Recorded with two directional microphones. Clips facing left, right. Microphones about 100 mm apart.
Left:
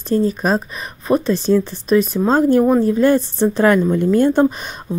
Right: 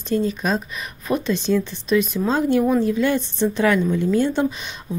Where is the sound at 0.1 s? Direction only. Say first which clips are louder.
Left 5 dB; 40° left (ahead or behind).